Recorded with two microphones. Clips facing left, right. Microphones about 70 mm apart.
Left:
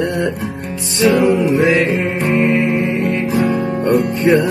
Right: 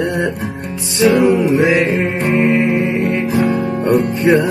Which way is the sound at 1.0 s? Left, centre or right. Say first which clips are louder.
Right 1 dB; right.